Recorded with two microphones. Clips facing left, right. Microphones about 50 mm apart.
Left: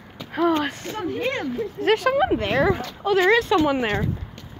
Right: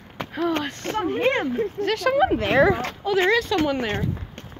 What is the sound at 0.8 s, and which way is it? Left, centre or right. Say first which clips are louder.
Speech: right 4 dB; right.